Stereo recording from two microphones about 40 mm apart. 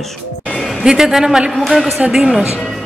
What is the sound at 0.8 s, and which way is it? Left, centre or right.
A woman's voice, centre.